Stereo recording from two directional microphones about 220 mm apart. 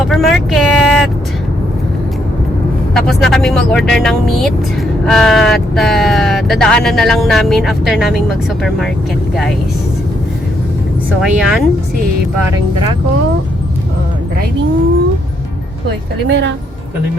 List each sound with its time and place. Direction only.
0.1 s vehicle: centre (ahead or behind)
2.9 s speech: centre (ahead or behind)
11.2 s speech: centre (ahead or behind)
16.3 s speech: 55° right (ahead or behind)